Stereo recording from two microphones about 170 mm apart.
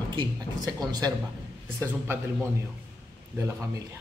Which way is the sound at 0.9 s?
25° right (ahead or behind).